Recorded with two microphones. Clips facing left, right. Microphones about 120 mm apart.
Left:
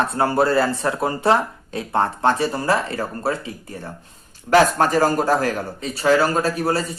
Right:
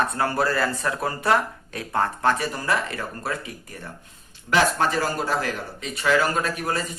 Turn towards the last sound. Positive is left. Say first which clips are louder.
# left 6 dB
turn(degrees=35)  # may be behind; listen again after turning